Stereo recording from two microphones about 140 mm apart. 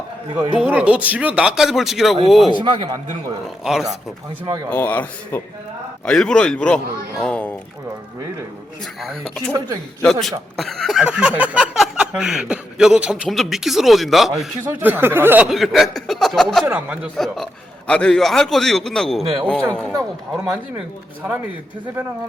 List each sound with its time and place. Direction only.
0.6 s speech: 10° right (ahead or behind)
2.5 s a man's voice: 30° right (ahead or behind)
3.6 s speech: 5° right (ahead or behind)
4.4 s a man's voice: 25° right (ahead or behind)
4.7 s a man's voice: 10° left (ahead or behind)
9.0 s speech: centre (ahead or behind)
14.6 s speech: 15° right (ahead or behind)
15.4 s speech: centre (ahead or behind)
16.6 s speech: 10° right (ahead or behind)
17.2 s speech: centre (ahead or behind)